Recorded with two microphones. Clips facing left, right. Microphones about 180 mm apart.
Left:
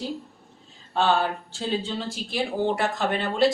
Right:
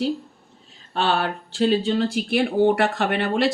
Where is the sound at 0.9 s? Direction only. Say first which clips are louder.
Even; 65° right (ahead or behind).